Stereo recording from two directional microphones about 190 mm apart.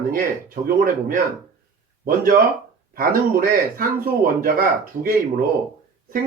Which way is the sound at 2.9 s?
50° right (ahead or behind).